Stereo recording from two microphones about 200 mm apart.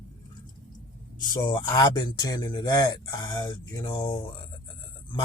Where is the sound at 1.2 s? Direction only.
20° left (ahead or behind).